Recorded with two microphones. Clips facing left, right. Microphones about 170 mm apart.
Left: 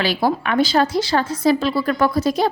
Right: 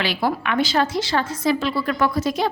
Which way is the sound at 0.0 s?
35° left (ahead or behind).